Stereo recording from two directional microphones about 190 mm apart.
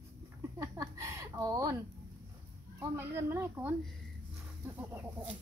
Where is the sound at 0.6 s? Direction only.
15° right (ahead or behind).